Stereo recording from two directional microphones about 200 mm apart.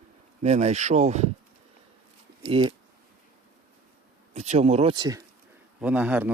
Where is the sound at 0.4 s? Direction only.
35° right (ahead or behind).